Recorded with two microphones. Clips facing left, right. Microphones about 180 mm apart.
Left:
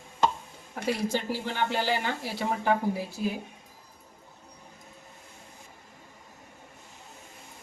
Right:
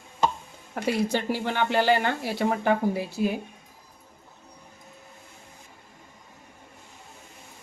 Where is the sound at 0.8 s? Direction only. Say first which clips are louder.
Right 3 dB; 70° right (ahead or behind).